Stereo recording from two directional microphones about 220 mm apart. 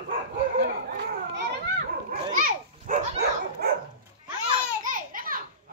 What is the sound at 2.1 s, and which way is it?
Dog, 35° right (ahead or behind).